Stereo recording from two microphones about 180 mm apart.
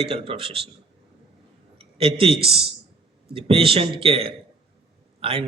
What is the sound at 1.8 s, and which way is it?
A man's voice, 30° right (ahead or behind).